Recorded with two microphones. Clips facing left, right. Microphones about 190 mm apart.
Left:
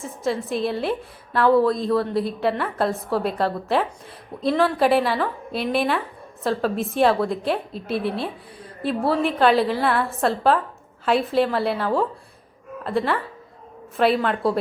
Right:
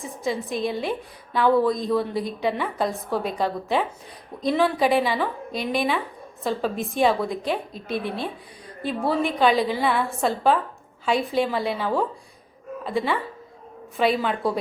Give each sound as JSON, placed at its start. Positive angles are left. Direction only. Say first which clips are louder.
{"t": 0.0, "sound": "a woman's voice", "louder": "left 2 dB", "side_deg": 0}
{"t": 8.0, "sound": "a woman's voice", "louder": "left 3 dB", "side_deg": 35}
{"t": 8.8, "sound": "a woman's voice", "louder": "left 2 dB", "side_deg": 0}